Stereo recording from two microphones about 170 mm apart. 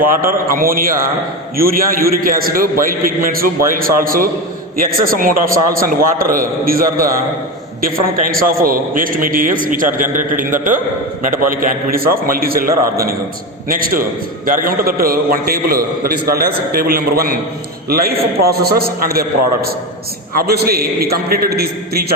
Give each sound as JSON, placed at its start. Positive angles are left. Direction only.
{"t": 0.3, "sound": "a man's voice", "side_deg": -60}